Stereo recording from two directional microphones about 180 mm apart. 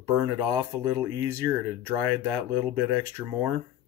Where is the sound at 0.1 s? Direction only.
15° right (ahead or behind).